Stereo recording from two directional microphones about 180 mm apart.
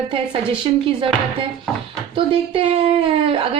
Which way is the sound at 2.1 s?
30° right (ahead or behind).